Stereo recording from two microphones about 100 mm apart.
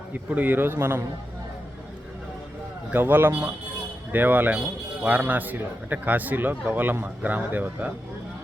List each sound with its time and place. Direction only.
0.1 s a man's voice: 15° right (ahead or behind)
2.9 s a man's voice: 20° right (ahead or behind)